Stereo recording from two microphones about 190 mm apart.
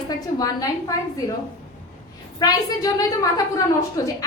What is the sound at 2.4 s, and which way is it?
A woman's voice, 20° left (ahead or behind).